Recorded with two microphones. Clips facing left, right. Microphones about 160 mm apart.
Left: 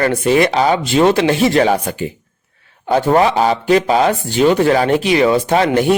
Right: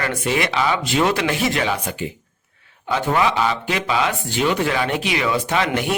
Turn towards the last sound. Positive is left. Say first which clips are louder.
# left 8 dB
turn(degrees=35)  # may be behind; listen again after turning